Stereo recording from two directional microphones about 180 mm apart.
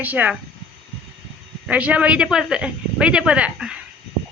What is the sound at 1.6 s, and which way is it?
Speech, 10° right (ahead or behind).